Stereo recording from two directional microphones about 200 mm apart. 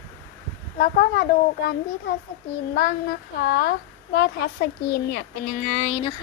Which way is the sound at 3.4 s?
50° left (ahead or behind).